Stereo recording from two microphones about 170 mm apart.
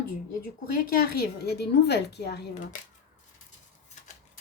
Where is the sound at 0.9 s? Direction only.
70° left (ahead or behind).